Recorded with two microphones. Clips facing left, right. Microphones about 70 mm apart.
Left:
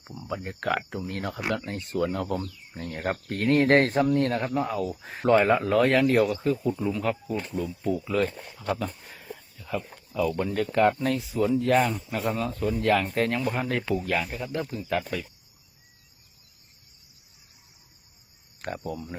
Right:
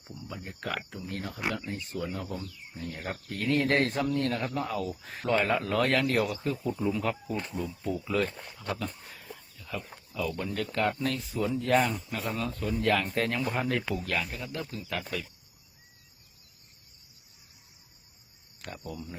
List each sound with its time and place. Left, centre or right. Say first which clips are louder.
0.3 s speech: left 8 dB; left
1.3 s speech: left 3 dB; left
2.7 s speech: left 7 dB; left
3.2 s speech: left 6 dB; left
4.1 s speech: left 5 dB; left
4.4 s speech: left 5 dB; centre
5.3 s speech: left 7 dB; left
5.5 s speech: left 5 dB; centre
9.6 s speech: left 6 dB; left
11.3 s speech: left 4 dB; centre
14.1 s speech: left 2 dB; centre
14.3 s speech: left 6 dB; left
18.6 s speech: left 9 dB; left